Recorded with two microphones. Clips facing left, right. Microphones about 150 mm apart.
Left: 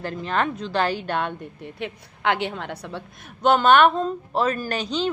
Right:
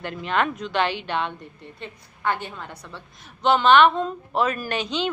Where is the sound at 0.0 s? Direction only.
35° left (ahead or behind).